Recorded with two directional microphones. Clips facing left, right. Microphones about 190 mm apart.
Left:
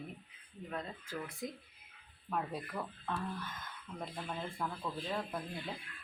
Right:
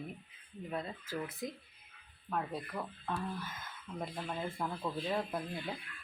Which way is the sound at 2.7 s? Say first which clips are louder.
Right 1 dB; 5° right (ahead or behind).